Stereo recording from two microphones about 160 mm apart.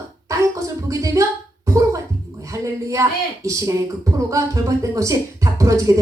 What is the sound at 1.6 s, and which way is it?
Gargling, 20° right (ahead or behind).